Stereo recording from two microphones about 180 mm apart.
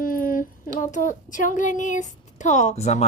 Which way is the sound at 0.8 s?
45° left (ahead or behind).